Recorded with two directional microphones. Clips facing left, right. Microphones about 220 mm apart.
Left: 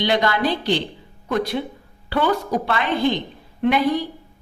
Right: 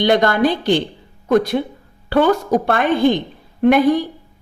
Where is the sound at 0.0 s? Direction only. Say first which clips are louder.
Right 5 dB; 50° right (ahead or behind).